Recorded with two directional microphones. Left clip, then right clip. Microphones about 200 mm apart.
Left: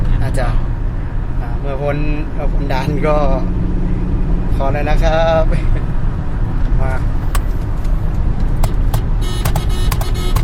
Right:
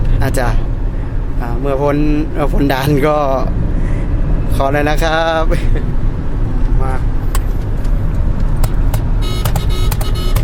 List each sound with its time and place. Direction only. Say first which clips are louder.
1.6 s speech: right 6 dB; 30° right (ahead or behind)
2.4 s speech: right 5 dB; 55° right (ahead or behind)
4.6 s speech: right 4 dB; 55° right (ahead or behind)